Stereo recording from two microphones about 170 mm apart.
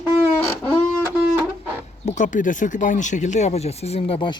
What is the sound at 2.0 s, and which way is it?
Speech, 45° left (ahead or behind).